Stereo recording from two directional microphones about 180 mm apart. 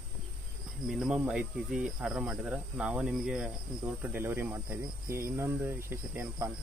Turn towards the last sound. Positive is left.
turn(degrees=-15)  # may be behind; listen again after turning